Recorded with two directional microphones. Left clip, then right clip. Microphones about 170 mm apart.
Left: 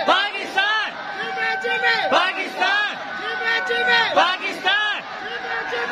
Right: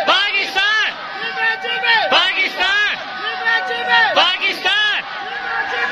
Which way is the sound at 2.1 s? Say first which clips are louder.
Right 5 dB; centre (ahead or behind).